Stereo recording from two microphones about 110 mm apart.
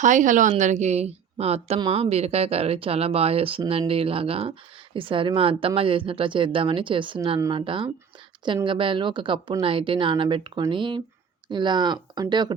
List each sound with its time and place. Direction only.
0.5 s speech: 90° right; by 12.5 s 40° right (ahead or behind)